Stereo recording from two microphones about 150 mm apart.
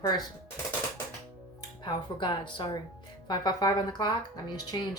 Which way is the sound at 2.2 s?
30° left (ahead or behind).